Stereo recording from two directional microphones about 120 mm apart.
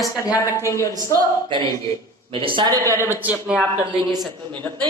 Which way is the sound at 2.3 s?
45° right (ahead or behind).